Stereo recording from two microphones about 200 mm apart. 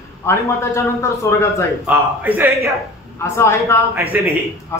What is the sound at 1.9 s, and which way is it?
Speech, 10° right (ahead or behind).